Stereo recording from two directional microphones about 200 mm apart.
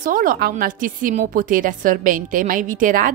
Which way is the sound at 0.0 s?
45° right (ahead or behind).